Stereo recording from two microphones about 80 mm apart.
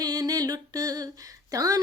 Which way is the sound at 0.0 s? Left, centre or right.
Right.